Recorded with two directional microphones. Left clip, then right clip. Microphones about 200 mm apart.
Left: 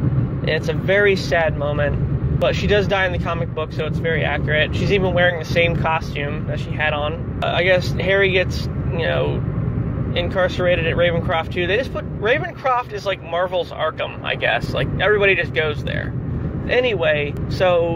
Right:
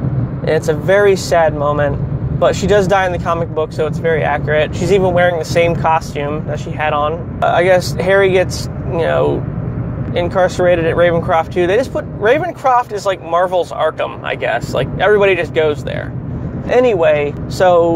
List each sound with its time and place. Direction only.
0.6 s speech: 35° right (ahead or behind)
16.7 s speech: 30° right (ahead or behind)